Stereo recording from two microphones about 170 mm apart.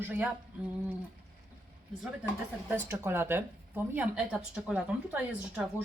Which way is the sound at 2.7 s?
15° right (ahead or behind).